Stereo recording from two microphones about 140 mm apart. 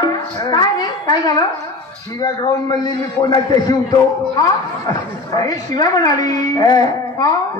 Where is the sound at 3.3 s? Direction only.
30° left (ahead or behind).